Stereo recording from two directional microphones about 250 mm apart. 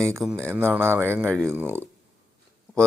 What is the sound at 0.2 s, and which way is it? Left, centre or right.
Speech, centre.